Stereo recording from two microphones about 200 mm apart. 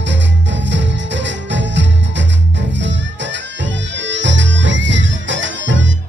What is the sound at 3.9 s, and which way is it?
Music, 65° right (ahead or behind).